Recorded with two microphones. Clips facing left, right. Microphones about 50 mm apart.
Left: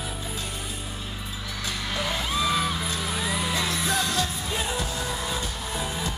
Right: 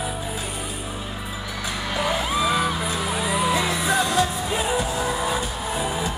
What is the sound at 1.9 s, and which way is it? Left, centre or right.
Music, centre.